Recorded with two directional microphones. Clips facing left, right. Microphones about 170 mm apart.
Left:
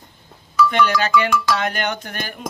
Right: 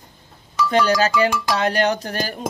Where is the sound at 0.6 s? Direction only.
35° right (ahead or behind).